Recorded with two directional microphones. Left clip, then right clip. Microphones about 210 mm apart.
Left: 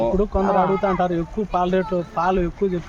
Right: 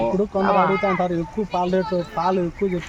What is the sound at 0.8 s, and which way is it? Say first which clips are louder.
Speech: left 1 dB; 20° left (ahead or behind).